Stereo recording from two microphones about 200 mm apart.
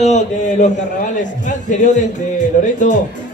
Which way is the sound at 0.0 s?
35° left (ahead or behind).